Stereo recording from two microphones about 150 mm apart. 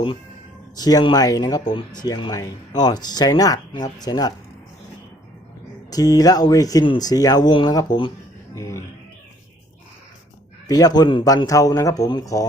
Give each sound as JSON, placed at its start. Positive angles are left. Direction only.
{"t": 0.8, "sound": "speech", "side_deg": 25}
{"t": 5.9, "sound": "speech", "side_deg": 25}
{"t": 10.7, "sound": "speech", "side_deg": 25}